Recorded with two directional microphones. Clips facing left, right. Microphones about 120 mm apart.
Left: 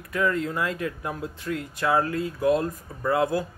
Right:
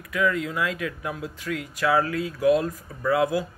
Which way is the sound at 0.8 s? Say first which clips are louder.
Even; 35° left (ahead or behind).